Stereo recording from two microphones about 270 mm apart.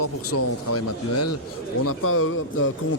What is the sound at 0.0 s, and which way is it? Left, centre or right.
Speech, left.